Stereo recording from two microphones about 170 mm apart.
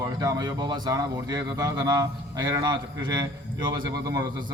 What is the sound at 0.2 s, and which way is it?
A man's voice, 25° right (ahead or behind).